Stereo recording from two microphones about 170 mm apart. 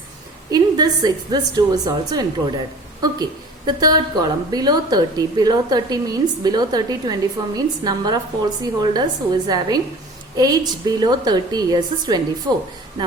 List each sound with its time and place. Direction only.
0.5 s a woman's voice: 25° right (ahead or behind)